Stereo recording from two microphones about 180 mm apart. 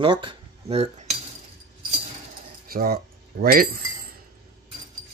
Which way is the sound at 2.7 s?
55° right (ahead or behind).